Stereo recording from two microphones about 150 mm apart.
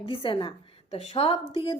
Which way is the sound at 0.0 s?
35° left (ahead or behind).